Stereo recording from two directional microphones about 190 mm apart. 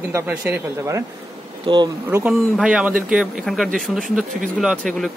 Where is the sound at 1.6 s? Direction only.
25° right (ahead or behind).